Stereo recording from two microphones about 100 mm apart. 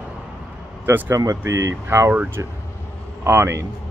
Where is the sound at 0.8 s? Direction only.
25° right (ahead or behind).